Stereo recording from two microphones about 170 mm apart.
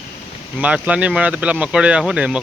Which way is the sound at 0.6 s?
5° right (ahead or behind).